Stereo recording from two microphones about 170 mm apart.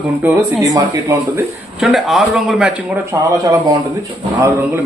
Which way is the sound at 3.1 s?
20° right (ahead or behind).